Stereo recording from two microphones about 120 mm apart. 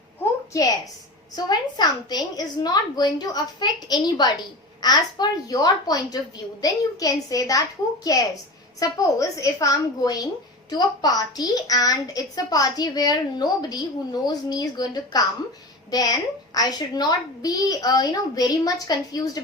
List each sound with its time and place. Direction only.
0.5 s a woman's voice: 25° left (ahead or behind)